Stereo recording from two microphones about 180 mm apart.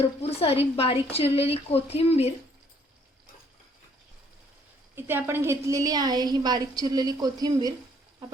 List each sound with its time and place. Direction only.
0.0 s speech: 35° left (ahead or behind)
4.9 s a woman's voice: 10° right (ahead or behind)